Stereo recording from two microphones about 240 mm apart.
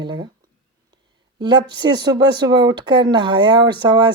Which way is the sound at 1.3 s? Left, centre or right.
Centre.